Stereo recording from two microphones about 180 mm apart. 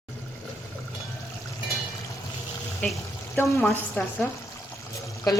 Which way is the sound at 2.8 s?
10° left (ahead or behind).